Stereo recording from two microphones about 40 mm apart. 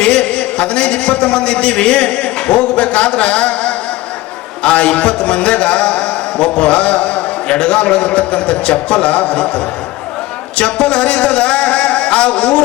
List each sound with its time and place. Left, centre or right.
0.0 s a man's voice: left